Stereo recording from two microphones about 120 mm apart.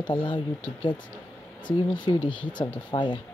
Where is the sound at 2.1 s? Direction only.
40° left (ahead or behind).